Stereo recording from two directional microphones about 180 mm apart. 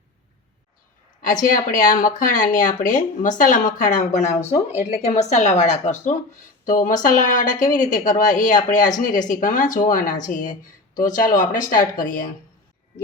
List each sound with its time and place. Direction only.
1.2 s speech: 45° left (ahead or behind)